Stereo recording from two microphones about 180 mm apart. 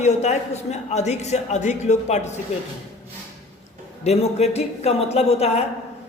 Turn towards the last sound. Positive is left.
turn(degrees=35)  # may be behind; listen again after turning